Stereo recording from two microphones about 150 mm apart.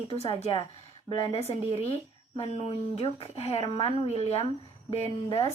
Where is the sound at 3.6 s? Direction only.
35° left (ahead or behind).